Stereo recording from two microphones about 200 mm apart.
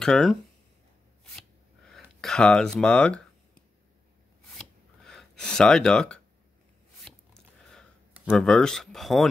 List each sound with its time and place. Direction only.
0.0 s speech: centre (ahead or behind)
1.9 s speech: centre (ahead or behind)
4.5 s a sound: centre (ahead or behind)